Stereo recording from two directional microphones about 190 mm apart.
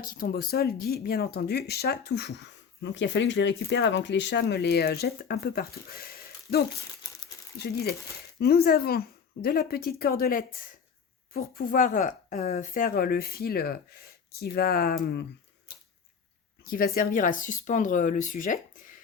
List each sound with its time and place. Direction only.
0.0 s speech: 50° left (ahead or behind)
7.6 s a woman's voice: 55° left (ahead or behind)
16.6 s a woman's voice: 50° left (ahead or behind)